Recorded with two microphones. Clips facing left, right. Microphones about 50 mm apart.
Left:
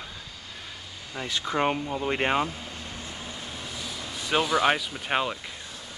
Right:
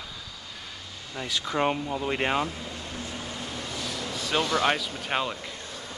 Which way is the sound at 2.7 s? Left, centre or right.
Right.